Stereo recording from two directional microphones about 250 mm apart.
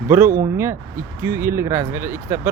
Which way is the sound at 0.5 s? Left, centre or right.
Centre.